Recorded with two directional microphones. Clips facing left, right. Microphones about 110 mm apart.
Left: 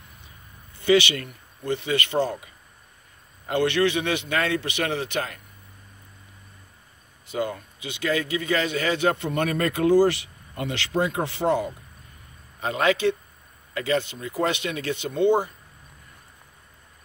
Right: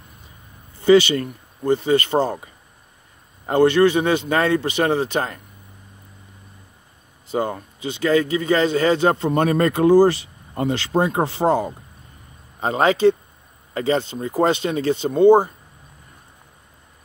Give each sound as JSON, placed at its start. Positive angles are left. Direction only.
{"t": 0.8, "sound": "speech", "side_deg": -40}
{"t": 7.2, "sound": "speech", "side_deg": -35}